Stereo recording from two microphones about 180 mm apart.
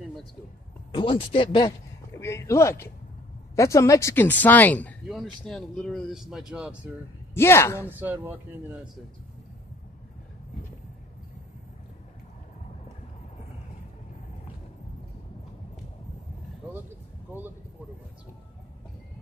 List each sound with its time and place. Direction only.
0.9 s speech: 30° left (ahead or behind)
2.1 s speech: 15° left (ahead or behind); by 6.9 s 5° right (ahead or behind)
7.3 s speech: 15° left (ahead or behind)
7.9 s speech: 10° right (ahead or behind)
17.3 s speech: 10° right (ahead or behind)